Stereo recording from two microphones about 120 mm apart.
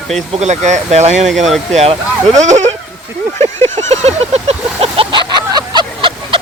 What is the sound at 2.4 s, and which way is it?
Speech, 80° right.